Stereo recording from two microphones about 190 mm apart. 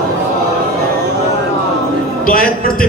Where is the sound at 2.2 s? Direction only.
50° left (ahead or behind).